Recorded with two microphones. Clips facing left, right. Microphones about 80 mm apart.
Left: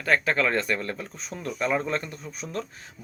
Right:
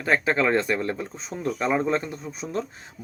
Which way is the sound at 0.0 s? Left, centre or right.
Centre.